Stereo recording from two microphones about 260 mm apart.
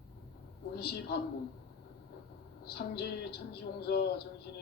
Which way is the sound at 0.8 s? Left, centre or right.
Left.